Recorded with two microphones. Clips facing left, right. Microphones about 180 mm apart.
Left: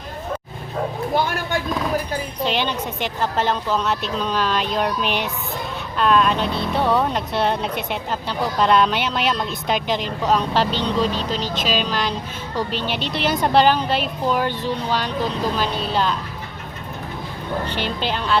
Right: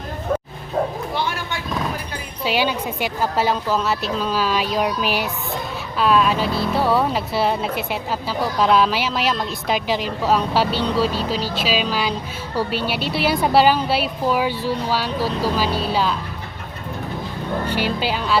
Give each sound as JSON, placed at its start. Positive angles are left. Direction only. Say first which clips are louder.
{"t": 1.1, "sound": "a sound", "louder": "left 4 dB", "side_deg": 50}
{"t": 2.4, "sound": "a woman's voice", "louder": "right 3 dB", "side_deg": -5}
{"t": 17.7, "sound": "a woman's voice", "louder": "right 5 dB", "side_deg": -10}